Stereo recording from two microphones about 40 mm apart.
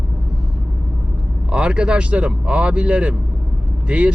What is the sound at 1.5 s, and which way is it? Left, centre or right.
Speech, right.